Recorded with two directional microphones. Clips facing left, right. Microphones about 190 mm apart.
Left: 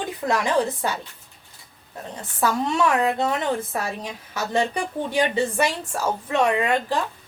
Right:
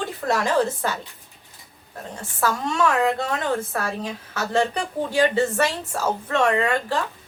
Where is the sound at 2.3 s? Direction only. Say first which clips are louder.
Left 1 dB; 20° left (ahead or behind).